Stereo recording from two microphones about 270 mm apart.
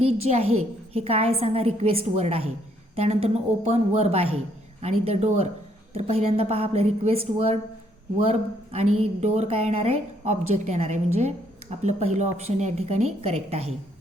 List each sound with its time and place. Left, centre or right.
0.0 s a woman's voice: right